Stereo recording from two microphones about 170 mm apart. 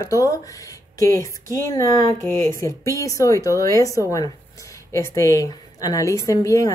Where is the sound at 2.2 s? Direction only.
45° right (ahead or behind).